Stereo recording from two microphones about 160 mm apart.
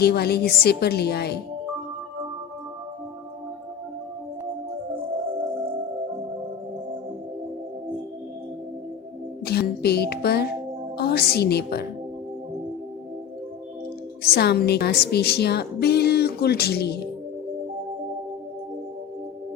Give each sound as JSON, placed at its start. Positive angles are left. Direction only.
{"t": 0.0, "sound": "a woman's voice", "side_deg": 90}
{"t": 9.4, "sound": "music", "side_deg": 80}
{"t": 10.9, "sound": "a woman's voice", "side_deg": 85}
{"t": 14.2, "sound": "a woman's voice", "side_deg": 80}